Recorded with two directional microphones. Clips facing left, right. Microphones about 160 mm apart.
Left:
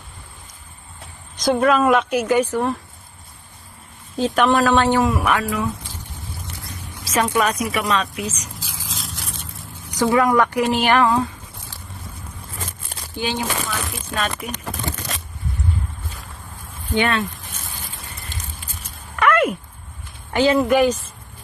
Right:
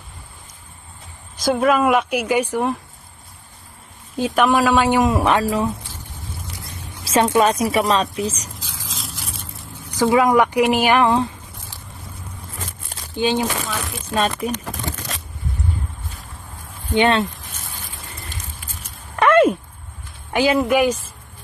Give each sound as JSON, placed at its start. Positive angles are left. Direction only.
{"t": 1.3, "sound": "speech", "side_deg": -5}
{"t": 4.2, "sound": "speech", "side_deg": -5}
{"t": 5.1, "sound": "a woman's voice", "side_deg": -25}
{"t": 8.5, "sound": "a sound", "side_deg": 10}
{"t": 9.9, "sound": "speech", "side_deg": -15}
{"t": 13.1, "sound": "speech", "side_deg": -20}
{"t": 14.1, "sound": "speech", "side_deg": -30}
{"t": 16.9, "sound": "speech", "side_deg": -25}
{"t": 19.1, "sound": "a sound", "side_deg": -30}
{"t": 20.3, "sound": "speech", "side_deg": -10}